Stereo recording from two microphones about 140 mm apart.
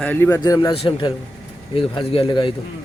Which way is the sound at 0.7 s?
40° left (ahead or behind).